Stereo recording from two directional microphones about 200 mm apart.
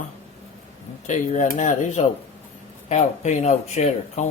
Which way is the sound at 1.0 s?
40° left (ahead or behind).